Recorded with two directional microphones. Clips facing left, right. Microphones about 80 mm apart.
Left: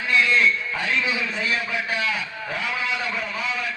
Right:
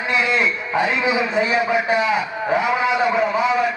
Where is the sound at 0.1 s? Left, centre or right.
Centre.